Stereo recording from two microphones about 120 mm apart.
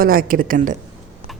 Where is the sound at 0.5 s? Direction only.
90° right.